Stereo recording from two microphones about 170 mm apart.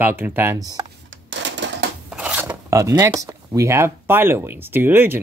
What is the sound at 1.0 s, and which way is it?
Typewriter, 90° right.